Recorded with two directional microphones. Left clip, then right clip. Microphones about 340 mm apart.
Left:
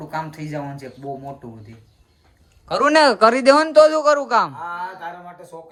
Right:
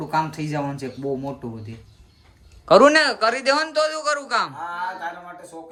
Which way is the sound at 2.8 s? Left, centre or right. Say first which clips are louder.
Left 3 dB; centre.